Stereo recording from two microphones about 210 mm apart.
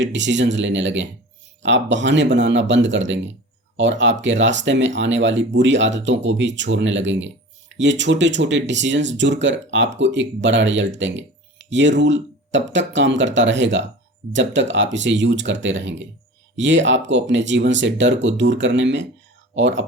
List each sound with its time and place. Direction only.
0.0 s speech: 60° right (ahead or behind)